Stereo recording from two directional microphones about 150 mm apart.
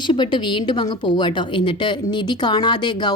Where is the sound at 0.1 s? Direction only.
30° left (ahead or behind).